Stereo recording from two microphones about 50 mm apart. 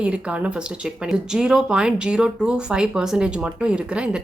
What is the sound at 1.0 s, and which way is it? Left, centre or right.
Speech, centre.